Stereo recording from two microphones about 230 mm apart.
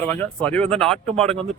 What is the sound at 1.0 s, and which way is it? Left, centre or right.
Speech, right.